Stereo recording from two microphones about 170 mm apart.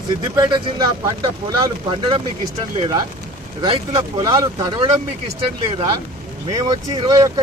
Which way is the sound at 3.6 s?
30° right (ahead or behind).